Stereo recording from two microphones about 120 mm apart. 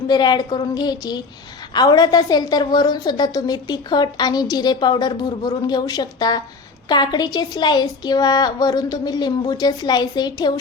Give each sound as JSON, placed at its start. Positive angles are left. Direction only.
{"t": 0.1, "sound": "a woman's voice", "side_deg": 35}